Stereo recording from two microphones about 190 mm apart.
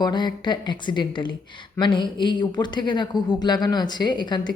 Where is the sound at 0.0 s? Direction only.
25° left (ahead or behind).